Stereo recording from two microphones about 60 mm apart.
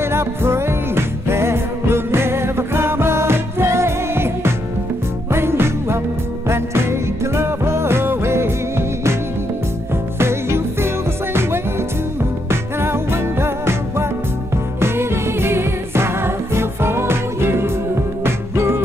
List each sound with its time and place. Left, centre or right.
0.0 s music: right
10.1 s music: right
12.4 s music: right